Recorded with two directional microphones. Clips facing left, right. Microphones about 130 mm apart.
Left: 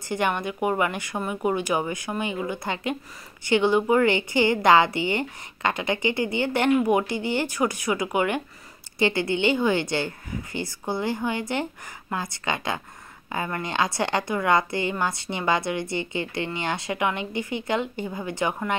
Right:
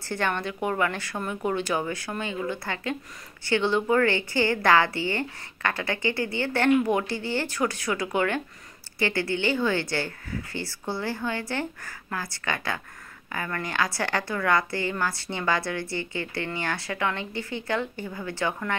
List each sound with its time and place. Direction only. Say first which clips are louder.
0.1 s a woman's voice: left 3 dB; 15° left (ahead or behind)